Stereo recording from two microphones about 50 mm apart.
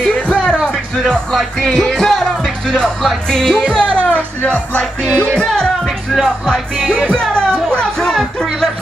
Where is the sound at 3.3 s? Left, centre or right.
Centre.